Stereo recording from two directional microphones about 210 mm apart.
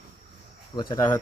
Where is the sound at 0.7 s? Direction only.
15° left (ahead or behind).